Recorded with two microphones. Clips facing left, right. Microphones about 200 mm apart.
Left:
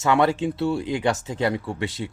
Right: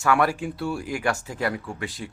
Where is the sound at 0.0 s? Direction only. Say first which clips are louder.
Left 3 dB; 25° left (ahead or behind).